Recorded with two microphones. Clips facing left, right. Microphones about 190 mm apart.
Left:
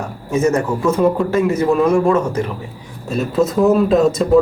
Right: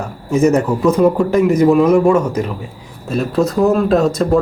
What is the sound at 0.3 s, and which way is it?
A man's voice, 15° right (ahead or behind).